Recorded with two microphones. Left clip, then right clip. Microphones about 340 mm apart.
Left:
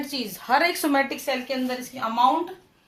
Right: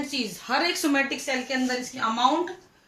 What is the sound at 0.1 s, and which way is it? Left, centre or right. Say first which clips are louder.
Speech: left 6 dB; centre.